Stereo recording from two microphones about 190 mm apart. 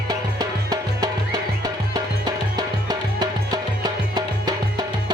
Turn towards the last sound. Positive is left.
turn(degrees=-20)  # may be behind; listen again after turning